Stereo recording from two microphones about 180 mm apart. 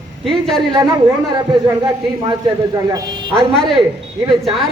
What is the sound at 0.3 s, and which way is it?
Speech, centre (ahead or behind).